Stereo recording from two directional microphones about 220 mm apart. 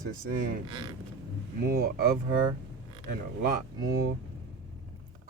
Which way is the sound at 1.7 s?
45° right (ahead or behind).